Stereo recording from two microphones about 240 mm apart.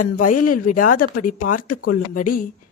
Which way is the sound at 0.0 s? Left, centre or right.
Left.